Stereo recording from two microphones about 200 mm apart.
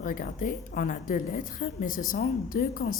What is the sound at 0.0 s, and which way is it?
A woman's voice, 45° left (ahead or behind).